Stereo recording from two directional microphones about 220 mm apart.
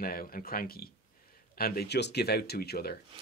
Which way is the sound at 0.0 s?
40° left (ahead or behind).